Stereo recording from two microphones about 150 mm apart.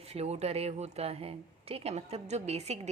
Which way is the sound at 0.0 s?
45° right (ahead or behind).